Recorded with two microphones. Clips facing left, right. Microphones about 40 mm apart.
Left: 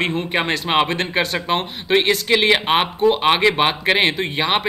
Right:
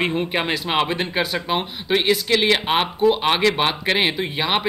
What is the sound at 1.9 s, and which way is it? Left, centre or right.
A man's voice, centre.